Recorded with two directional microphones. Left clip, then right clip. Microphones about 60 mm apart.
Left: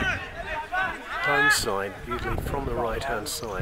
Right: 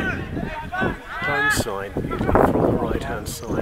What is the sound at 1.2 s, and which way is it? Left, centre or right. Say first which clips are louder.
Speech: right 1 dB; centre.